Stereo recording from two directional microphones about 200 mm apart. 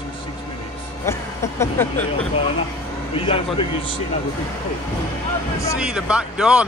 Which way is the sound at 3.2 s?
25° left (ahead or behind).